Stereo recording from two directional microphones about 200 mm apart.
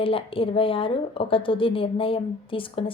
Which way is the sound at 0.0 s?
25° left (ahead or behind).